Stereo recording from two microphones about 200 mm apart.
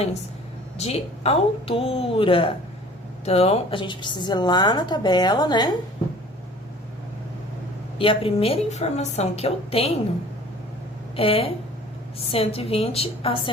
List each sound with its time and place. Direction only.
0.8 s a woman's voice: 30° left (ahead or behind)
7.9 s a woman's voice: 25° left (ahead or behind)
11.2 s a woman's voice: 30° left (ahead or behind)